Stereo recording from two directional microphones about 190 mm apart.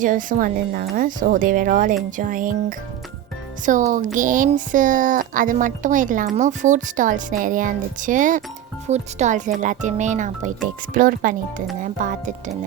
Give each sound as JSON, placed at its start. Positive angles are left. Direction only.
{"t": 0.0, "sound": "speech", "side_deg": -45}